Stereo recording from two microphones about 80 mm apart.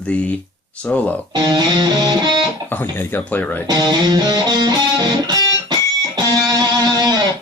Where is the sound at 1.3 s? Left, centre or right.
Right.